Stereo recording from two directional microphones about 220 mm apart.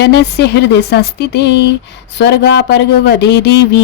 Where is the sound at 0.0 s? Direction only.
50° left (ahead or behind).